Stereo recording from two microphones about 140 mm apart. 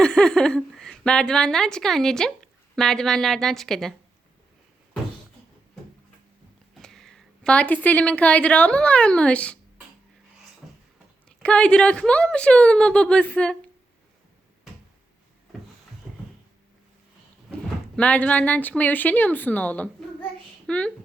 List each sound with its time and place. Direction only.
0.0 s a woman's voice: 5° left (ahead or behind)
6.7 s speech: 5° left (ahead or behind)
11.3 s a woman's voice: 10° left (ahead or behind)
16.1 s a sound: centre (ahead or behind)
17.9 s a woman's voice: 10° left (ahead or behind)